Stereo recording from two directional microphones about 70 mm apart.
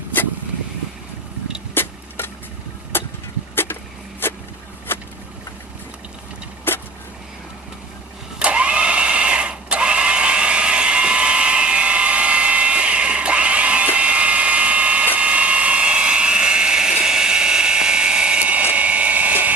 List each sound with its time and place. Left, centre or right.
1.7 s vehicle: left
4.2 s a sound: left
6.7 s vehicle: left
8.4 s vehicle: centre